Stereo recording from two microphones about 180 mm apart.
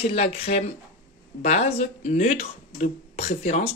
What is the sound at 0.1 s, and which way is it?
Speech, 35° left (ahead or behind).